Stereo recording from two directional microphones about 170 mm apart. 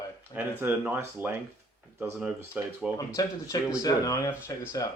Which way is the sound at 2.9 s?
20° left (ahead or behind).